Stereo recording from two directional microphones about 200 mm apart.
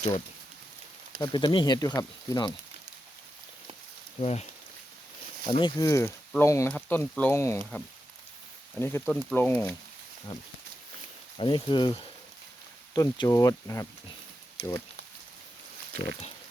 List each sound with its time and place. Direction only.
1.2 s speech: 25° left (ahead or behind)
4.2 s speech: 30° left (ahead or behind)
5.5 s speech: 25° left (ahead or behind)
8.8 s speech: 10° left (ahead or behind)
11.3 s speech: 25° left (ahead or behind)